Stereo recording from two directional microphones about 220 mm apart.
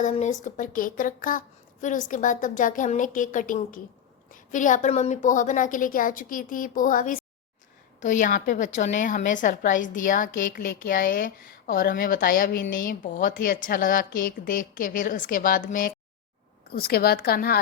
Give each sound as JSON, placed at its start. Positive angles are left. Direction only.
{"t": 0.0, "sound": "a woman's voice", "side_deg": 35}